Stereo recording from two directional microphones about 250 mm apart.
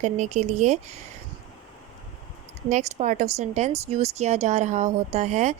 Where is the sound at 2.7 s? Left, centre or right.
Right.